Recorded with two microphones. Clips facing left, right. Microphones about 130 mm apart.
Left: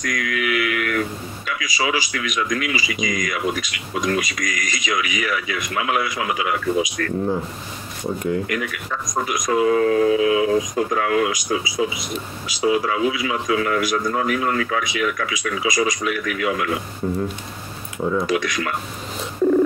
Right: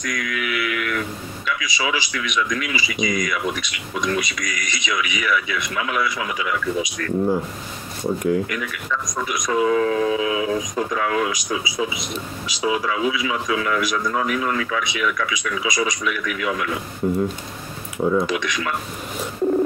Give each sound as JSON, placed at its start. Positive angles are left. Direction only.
{"t": 0.0, "sound": "speech", "side_deg": 45}
{"t": 8.5, "sound": "speech", "side_deg": 45}
{"t": 12.6, "sound": "speech", "side_deg": 45}
{"t": 17.0, "sound": "speech", "side_deg": 0}
{"t": 18.2, "sound": "speech", "side_deg": 45}